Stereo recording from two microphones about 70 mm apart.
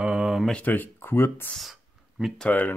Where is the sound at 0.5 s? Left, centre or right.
Left.